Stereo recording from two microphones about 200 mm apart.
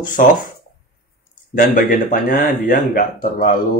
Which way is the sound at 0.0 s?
45° left (ahead or behind).